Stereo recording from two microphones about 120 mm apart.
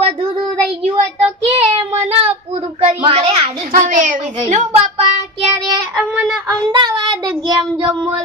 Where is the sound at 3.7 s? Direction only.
90° right.